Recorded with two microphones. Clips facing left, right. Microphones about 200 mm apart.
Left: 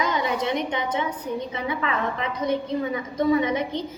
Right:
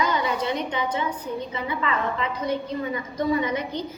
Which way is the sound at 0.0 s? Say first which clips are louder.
Even; 20° left (ahead or behind).